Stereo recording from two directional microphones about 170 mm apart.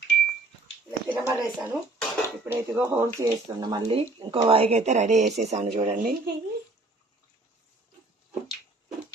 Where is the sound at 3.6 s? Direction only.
25° right (ahead or behind).